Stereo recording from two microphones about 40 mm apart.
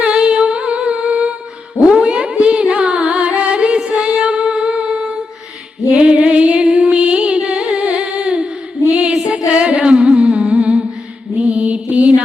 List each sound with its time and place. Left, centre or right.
0.0 s humming: right
1.9 s music: right